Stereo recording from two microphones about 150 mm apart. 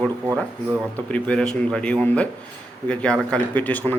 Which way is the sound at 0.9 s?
10° left (ahead or behind).